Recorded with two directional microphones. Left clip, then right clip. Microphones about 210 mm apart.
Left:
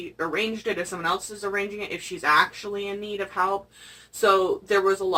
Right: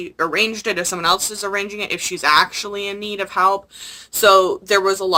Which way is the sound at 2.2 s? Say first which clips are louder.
Right 5 dB; 20° right (ahead or behind).